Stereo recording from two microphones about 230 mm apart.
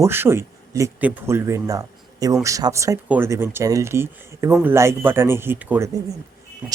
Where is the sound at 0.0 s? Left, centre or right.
Centre.